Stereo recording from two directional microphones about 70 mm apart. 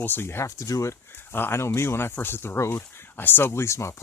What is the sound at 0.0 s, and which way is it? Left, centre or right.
Speech, left.